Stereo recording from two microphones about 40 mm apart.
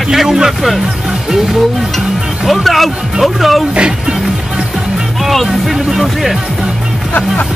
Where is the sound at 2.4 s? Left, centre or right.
Centre.